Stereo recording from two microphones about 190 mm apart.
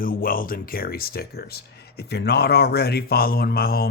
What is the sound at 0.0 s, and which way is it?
Speech, 50° left (ahead or behind).